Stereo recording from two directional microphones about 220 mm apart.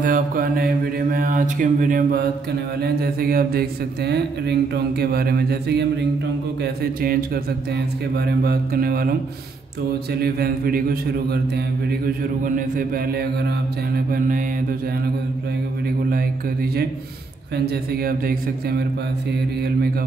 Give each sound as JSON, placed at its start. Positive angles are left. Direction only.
{"t": 0.0, "sound": "mantra", "side_deg": -40}
{"t": 2.8, "sound": "speech", "side_deg": -45}
{"t": 6.6, "sound": "mantra", "side_deg": -45}
{"t": 7.7, "sound": "speech", "side_deg": -45}
{"t": 10.2, "sound": "speech", "side_deg": -45}
{"t": 13.9, "sound": "mantra", "side_deg": -40}
{"t": 18.0, "sound": "mantra", "side_deg": -40}